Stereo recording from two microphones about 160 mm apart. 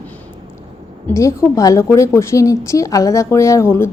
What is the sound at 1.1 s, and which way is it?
A woman's voice, 20° left (ahead or behind).